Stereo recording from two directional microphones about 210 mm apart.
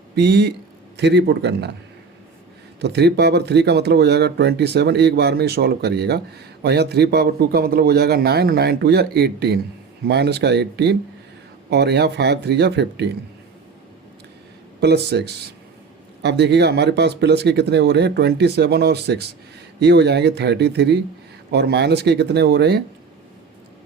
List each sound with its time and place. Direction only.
0.2 s speech: 55° right (ahead or behind)
2.8 s speech: 50° right (ahead or behind)
14.8 s speech: 50° right (ahead or behind)